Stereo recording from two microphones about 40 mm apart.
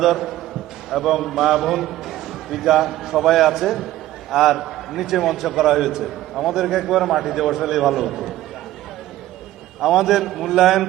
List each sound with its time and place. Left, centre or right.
0.0 s a man's voice: centre
9.8 s a man's voice: centre